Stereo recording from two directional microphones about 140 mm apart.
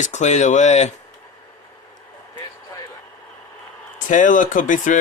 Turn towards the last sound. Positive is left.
turn(degrees=65)  # may be behind; listen again after turning